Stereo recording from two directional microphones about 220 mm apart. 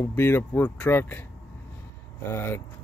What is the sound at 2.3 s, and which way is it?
Speech, 10° left (ahead or behind).